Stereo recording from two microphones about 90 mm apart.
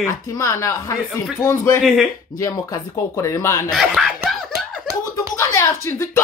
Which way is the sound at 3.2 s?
35° left (ahead or behind).